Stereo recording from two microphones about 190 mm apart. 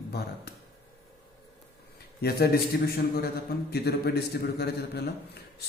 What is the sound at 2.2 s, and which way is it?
A man's voice, 55° left (ahead or behind).